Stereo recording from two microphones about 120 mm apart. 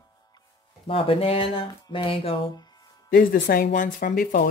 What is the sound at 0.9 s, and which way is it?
Speech, 50° left (ahead or behind).